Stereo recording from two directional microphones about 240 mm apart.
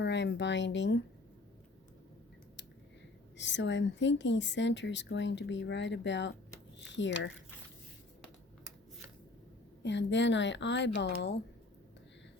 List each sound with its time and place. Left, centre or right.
0.0 s a woman's voice: left
3.3 s a woman's voice: left
9.8 s a woman's voice: left